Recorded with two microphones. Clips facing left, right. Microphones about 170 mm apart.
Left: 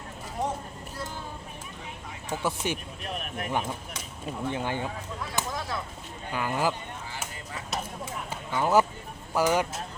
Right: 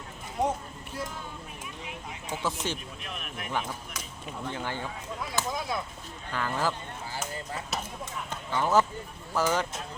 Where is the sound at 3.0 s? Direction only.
40° left (ahead or behind).